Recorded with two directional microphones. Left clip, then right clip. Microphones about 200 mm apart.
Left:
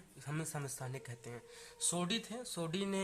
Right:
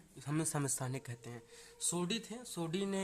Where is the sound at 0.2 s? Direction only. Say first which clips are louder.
Right 5 dB; 35° right (ahead or behind).